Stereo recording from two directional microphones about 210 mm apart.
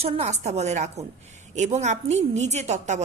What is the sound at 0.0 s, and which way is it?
A woman's voice, 30° right (ahead or behind).